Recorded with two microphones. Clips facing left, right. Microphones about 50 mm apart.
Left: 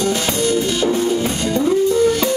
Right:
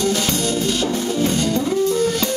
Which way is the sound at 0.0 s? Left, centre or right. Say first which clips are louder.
Left 2 dB; centre.